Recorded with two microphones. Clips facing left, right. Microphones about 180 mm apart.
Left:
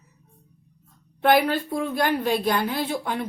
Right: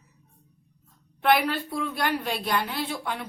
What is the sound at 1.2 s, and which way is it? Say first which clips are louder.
A woman's voice: left 3 dB; 45° left (ahead or behind).